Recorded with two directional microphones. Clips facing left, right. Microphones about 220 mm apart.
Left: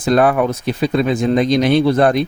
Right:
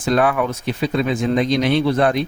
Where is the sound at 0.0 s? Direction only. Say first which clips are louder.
Left 4 dB; 40° left (ahead or behind).